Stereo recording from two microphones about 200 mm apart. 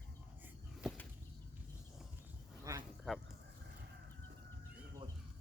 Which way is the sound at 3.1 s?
Centre (ahead or behind).